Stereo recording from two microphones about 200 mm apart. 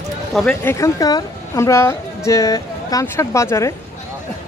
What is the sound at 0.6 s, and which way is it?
Speech, 15° left (ahead or behind).